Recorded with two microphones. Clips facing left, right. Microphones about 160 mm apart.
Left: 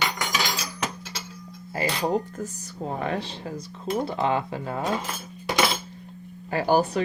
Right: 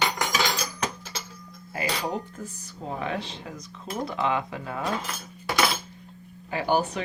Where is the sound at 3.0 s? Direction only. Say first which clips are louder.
Left 2 dB; 40° left (ahead or behind).